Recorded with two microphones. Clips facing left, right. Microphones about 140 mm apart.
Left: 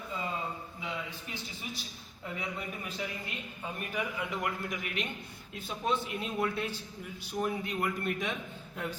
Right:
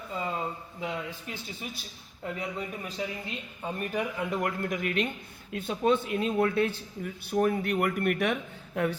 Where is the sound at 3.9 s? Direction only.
45° right (ahead or behind).